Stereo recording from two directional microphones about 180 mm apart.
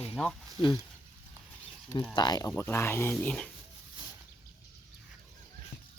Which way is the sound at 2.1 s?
25° left (ahead or behind).